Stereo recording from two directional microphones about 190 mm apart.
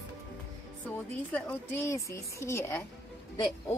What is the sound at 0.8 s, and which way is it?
Speech, 10° left (ahead or behind).